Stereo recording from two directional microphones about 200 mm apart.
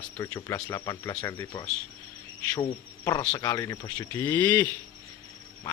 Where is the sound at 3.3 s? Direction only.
15° left (ahead or behind).